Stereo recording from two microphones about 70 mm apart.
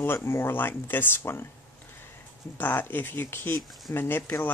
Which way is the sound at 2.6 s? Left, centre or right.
Left.